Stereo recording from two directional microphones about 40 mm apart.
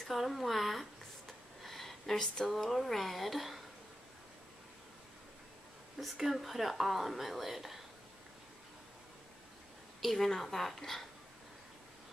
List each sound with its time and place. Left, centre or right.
0.0 s a sound: centre
2.1 s speech: centre
2.5 s speech: centre
5.9 s speech: centre
9.9 s a sound: centre
10.2 s speech: centre